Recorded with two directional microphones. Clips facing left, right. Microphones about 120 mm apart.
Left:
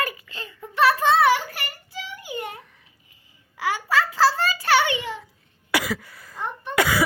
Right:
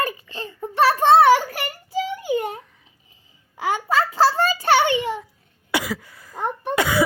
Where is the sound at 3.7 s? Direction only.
45° right (ahead or behind).